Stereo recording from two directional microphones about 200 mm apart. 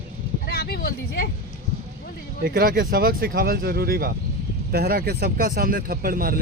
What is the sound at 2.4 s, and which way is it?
Speech, 45° right (ahead or behind).